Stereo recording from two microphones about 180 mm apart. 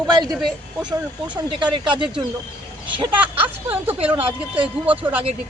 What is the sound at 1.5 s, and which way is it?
Speech, 30° right (ahead or behind).